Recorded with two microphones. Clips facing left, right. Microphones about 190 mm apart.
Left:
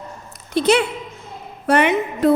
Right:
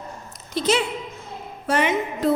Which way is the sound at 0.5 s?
65° left (ahead or behind).